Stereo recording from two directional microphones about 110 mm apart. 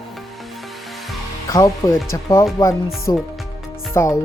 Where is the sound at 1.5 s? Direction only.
30° left (ahead or behind).